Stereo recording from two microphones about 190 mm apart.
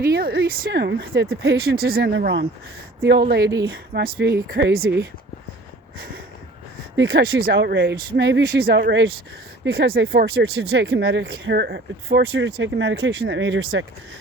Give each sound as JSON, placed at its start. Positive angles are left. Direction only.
{"t": 0.0, "sound": "speech", "side_deg": -55}
{"t": 3.6, "sound": "speech", "side_deg": -90}
{"t": 4.0, "sound": "speech", "side_deg": -60}
{"t": 6.9, "sound": "speech", "side_deg": -80}
{"t": 7.4, "sound": "speech", "side_deg": -65}
{"t": 9.6, "sound": "speech", "side_deg": -55}